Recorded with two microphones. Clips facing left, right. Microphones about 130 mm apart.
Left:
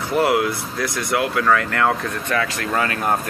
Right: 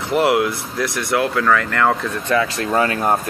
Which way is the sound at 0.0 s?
20° right (ahead or behind).